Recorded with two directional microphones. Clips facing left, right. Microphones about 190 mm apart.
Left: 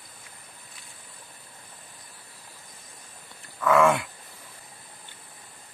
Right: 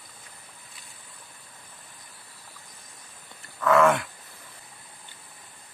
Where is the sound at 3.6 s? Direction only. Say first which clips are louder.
Even; 10° left (ahead or behind).